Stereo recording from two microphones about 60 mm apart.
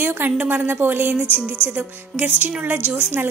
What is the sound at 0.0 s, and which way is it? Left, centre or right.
A woman's voice, right.